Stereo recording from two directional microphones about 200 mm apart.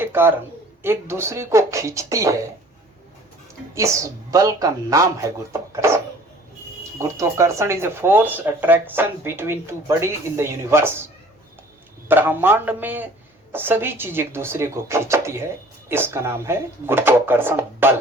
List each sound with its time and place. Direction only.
0.0 s a sound: 10° right (ahead or behind)
0.8 s speech: 10° right (ahead or behind)
3.8 s speech: 15° right (ahead or behind)
7.0 s speech: 15° right (ahead or behind)
12.0 s speech: 10° right (ahead or behind)